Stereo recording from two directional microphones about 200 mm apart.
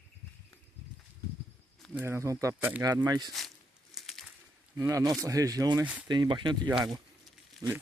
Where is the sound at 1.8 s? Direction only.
10° right (ahead or behind).